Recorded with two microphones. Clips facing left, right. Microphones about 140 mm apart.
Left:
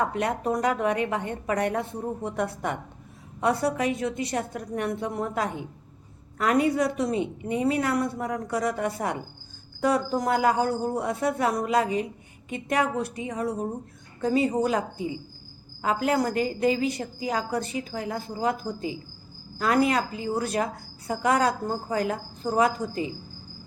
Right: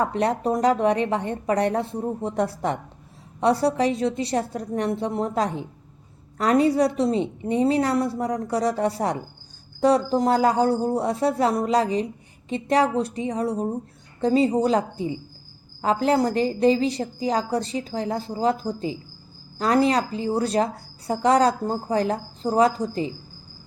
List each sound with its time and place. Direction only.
0.0 s a woman's voice: 35° right (ahead or behind)
10.2 s a woman's voice: 30° right (ahead or behind)